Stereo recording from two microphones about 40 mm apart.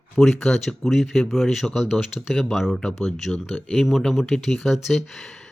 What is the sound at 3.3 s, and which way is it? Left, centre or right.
Speech, left.